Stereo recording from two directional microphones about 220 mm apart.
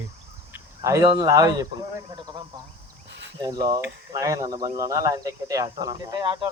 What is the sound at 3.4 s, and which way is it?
Speech, 20° right (ahead or behind).